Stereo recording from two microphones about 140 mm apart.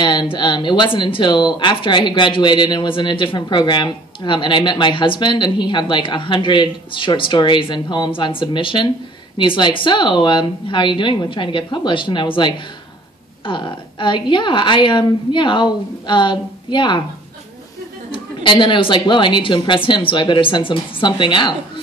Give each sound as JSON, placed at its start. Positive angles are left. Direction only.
{"t": 0.0, "sound": "speech", "side_deg": 35}
{"t": 18.1, "sound": "speech", "side_deg": 35}